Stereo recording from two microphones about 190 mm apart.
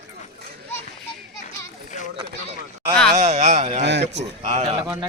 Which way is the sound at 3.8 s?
65° right (ahead or behind).